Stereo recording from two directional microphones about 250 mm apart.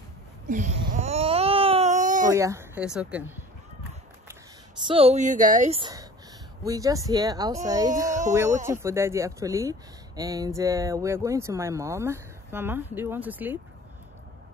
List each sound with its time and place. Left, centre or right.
0.5 s baby cry: right
2.3 s speech: centre
4.8 s a woman's voice: right; by 13.6 s centre